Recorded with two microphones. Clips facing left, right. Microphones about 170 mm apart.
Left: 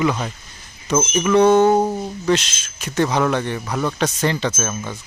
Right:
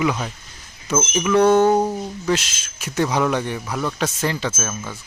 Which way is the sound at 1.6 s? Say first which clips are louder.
Left 1 dB; 10° left (ahead or behind).